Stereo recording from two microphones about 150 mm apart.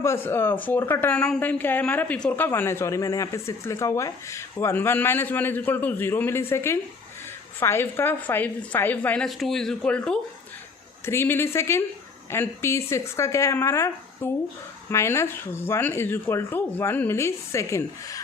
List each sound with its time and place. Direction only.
0.0 s a woman's voice: 15° left (ahead or behind)